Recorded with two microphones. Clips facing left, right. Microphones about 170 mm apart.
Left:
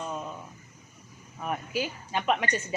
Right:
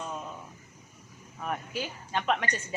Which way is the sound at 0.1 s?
5° left (ahead or behind).